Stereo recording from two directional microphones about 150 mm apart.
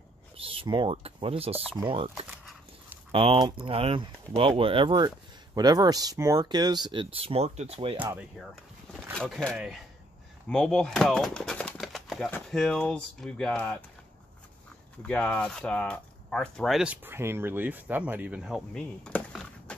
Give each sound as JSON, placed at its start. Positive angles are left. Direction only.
{"t": 0.4, "sound": "speech", "side_deg": -35}
{"t": 3.1, "sound": "speech", "side_deg": -40}
{"t": 8.0, "sound": "speech", "side_deg": -10}
{"t": 9.1, "sound": "speech", "side_deg": 5}
{"t": 15.0, "sound": "speech", "side_deg": 5}